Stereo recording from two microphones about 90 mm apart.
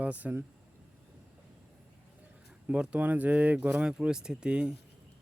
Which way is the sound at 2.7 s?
15° right (ahead or behind).